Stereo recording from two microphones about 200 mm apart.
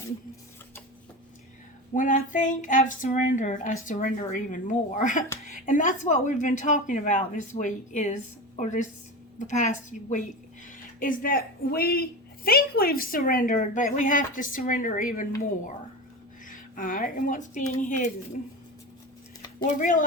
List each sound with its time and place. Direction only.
1.9 s speech: 40° left (ahead or behind)
16.5 s a woman's voice: 45° left (ahead or behind)
19.8 s speech: 40° left (ahead or behind)